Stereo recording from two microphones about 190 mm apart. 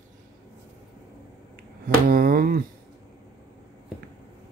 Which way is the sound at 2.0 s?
50° right (ahead or behind).